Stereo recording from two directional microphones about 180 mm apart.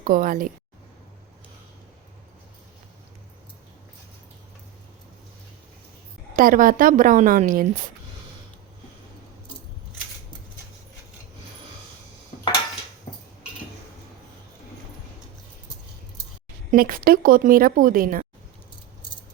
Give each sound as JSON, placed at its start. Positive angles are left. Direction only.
{"t": 0.0, "sound": "a woman's voice", "side_deg": -50}
{"t": 6.3, "sound": "a woman's voice", "side_deg": -50}
{"t": 16.7, "sound": "a woman's voice", "side_deg": -55}